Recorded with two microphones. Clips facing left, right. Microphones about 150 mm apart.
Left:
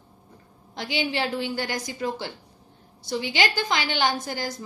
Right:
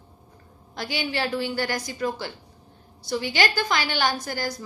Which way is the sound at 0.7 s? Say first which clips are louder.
Left 1 dB; 20° left (ahead or behind).